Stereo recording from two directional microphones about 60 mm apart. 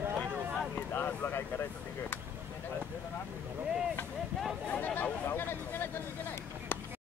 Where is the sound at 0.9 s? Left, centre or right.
Left.